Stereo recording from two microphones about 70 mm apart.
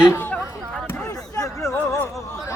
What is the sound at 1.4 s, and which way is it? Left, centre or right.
Music, left.